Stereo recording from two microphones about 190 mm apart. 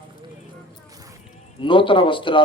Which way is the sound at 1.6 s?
25° left (ahead or behind).